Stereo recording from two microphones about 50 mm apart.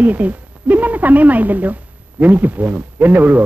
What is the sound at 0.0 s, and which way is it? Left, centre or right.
A man's voice, right.